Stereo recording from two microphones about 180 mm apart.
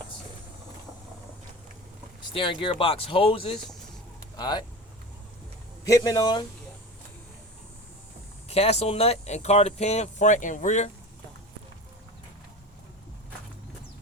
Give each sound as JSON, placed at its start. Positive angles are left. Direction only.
{"t": 2.3, "sound": "speech", "side_deg": 30}
{"t": 5.8, "sound": "speech", "side_deg": 20}
{"t": 8.4, "sound": "speech", "side_deg": 35}